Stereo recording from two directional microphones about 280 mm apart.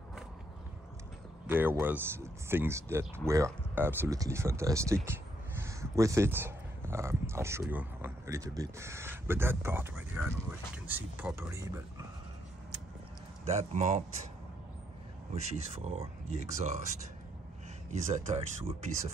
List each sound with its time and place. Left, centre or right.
1.5 s speech: centre
13.5 s speech: right
15.3 s speech: right
18.1 s speech: right